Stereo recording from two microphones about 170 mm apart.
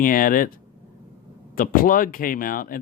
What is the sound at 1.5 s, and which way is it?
Speech, 55° left (ahead or behind).